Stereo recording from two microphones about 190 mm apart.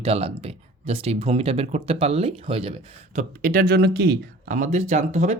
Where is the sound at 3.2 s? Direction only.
45° right (ahead or behind).